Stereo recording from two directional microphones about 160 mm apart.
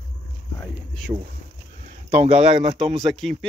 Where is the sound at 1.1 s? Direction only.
40° right (ahead or behind).